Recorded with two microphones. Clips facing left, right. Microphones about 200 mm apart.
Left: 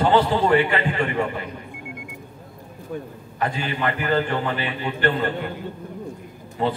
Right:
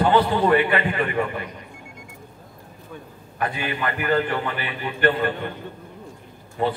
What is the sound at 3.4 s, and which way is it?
A man's voice, 30° left (ahead or behind).